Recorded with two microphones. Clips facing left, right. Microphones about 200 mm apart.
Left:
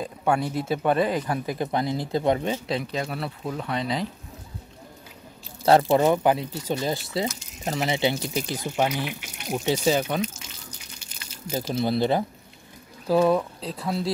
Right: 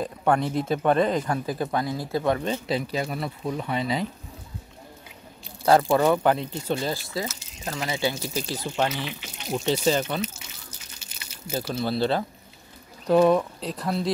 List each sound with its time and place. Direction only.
0.0 s speech: 10° left (ahead or behind)
2.6 s speech: centre (ahead or behind)
5.9 s speech: 20° left (ahead or behind)
6.9 s speech: 20° left (ahead or behind)
10.2 s water: 5° right (ahead or behind)
11.5 s speech: 10° left (ahead or behind)
13.0 s speech: centre (ahead or behind)